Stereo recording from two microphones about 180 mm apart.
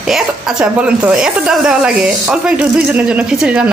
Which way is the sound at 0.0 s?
Centre (ahead or behind).